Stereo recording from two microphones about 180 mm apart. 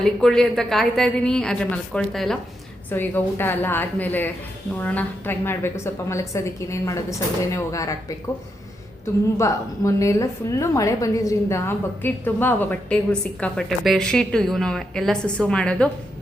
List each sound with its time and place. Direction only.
0.0 s a woman's voice: 5° left (ahead or behind)
9.4 s a woman's voice: 15° left (ahead or behind)